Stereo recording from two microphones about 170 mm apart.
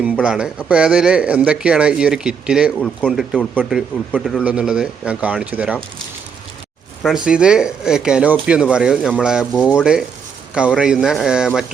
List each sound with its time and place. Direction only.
0.0 s a man's voice: 5° right (ahead or behind)
2.7 s a man's voice: 5° left (ahead or behind)
7.3 s a man's voice: 5° right (ahead or behind)